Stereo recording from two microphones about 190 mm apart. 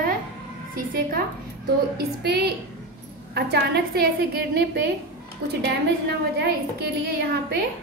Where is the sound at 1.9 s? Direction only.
60° right (ahead or behind).